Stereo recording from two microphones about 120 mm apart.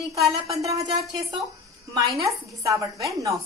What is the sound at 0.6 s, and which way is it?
Speech, 30° right (ahead or behind).